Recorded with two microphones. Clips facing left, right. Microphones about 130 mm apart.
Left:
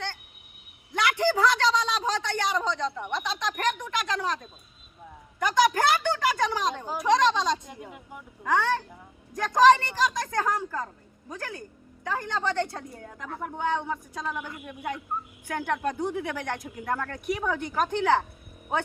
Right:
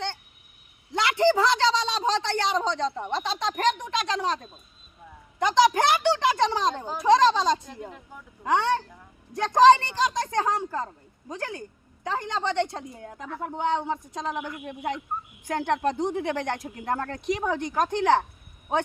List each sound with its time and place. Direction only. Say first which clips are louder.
0.9 s a man's voice: right 3 dB; 25° right (ahead or behind)
5.4 s a man's voice: right 2 dB; 20° right (ahead or behind)
7.9 s speech: right 1 dB; 10° left (ahead or behind)
8.4 s a man's voice: right 2 dB; 25° right (ahead or behind)